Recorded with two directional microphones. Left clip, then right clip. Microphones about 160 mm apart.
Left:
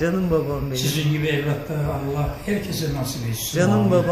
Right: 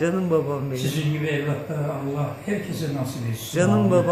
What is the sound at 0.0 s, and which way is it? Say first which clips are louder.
Speech: even; centre (ahead or behind).